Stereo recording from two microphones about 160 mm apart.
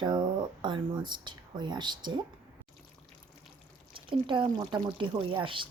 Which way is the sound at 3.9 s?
30° right (ahead or behind).